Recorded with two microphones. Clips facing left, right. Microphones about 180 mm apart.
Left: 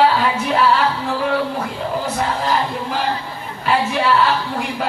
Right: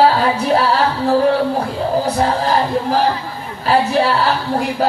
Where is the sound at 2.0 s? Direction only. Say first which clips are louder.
Right 4 dB; 35° right (ahead or behind).